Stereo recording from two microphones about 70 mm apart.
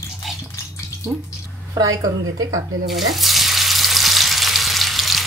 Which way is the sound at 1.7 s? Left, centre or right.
Right.